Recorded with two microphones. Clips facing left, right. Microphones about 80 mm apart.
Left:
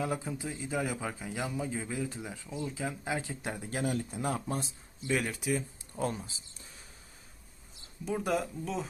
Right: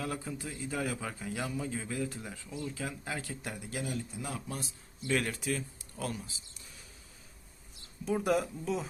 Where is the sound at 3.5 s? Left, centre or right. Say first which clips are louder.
Left 5 dB; left.